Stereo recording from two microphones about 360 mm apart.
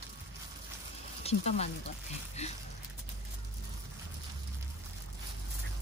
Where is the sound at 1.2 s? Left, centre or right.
Centre.